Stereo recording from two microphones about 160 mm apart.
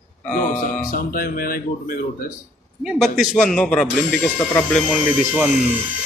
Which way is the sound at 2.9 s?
Centre (ahead or behind).